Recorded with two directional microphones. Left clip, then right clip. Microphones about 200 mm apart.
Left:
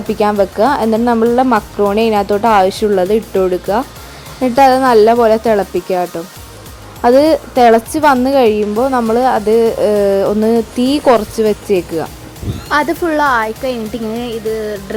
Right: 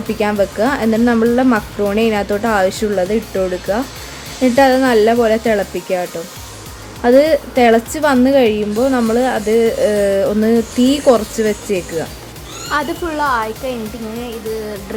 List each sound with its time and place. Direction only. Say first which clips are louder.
0.2 s a woman's voice: left 4 dB; 20° left (ahead or behind)